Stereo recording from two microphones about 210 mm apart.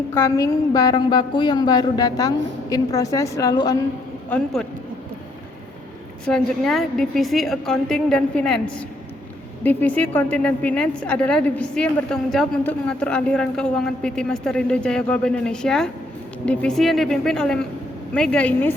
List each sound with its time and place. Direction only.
0.1 s a woman's voice: 15° left (ahead or behind)
4.3 s a woman's voice: 5° left (ahead or behind)
6.2 s a woman's voice: centre (ahead or behind)